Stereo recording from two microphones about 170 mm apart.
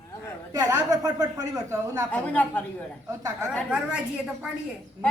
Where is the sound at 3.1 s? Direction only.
20° right (ahead or behind).